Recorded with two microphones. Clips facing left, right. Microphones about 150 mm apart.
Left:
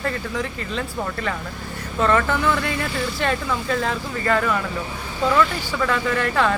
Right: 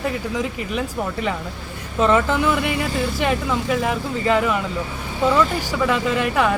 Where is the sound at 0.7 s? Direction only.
15° right (ahead or behind).